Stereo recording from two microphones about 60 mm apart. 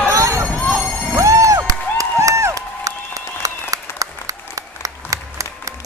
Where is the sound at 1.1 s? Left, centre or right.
Right.